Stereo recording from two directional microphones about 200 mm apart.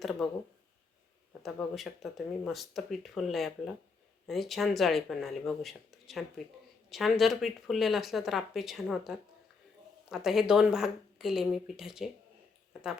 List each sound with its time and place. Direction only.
0.0 s speech: centre (ahead or behind)
1.3 s speech: centre (ahead or behind)